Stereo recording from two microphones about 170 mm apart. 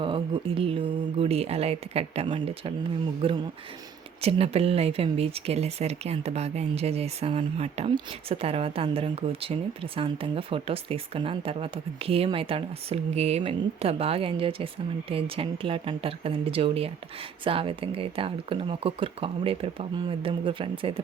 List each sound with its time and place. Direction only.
0.0 s speech: 30° right (ahead or behind)